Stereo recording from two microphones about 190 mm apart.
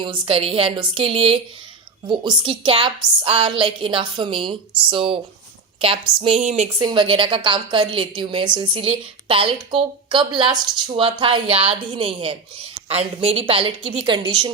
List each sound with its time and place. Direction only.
0.0 s speech: 25° right (ahead or behind)
6.7 s speech: 25° right (ahead or behind)